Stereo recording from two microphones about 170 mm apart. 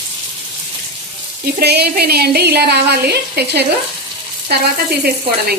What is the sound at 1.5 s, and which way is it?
A woman's voice, 70° right (ahead or behind).